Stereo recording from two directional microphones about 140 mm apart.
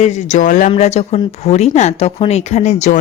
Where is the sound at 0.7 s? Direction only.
50° left (ahead or behind).